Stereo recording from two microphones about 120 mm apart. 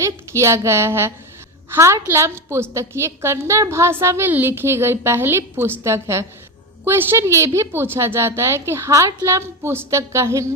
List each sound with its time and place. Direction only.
0.0 s a woman's voice: 25° right (ahead or behind)